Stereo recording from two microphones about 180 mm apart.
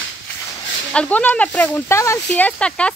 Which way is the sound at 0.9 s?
5° left (ahead or behind).